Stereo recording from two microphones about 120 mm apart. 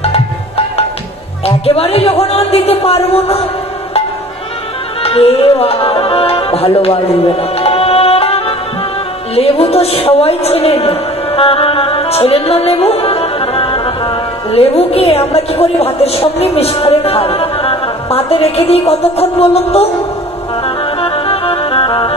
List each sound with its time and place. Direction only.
0.0 s music: 55° left (ahead or behind)
1.4 s a woman's voice: 55° left (ahead or behind)
5.0 s a woman's voice: 55° left (ahead or behind)
20.6 s music: 50° left (ahead or behind)